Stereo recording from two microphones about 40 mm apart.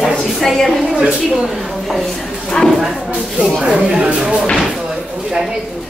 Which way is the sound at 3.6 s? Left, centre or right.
Right.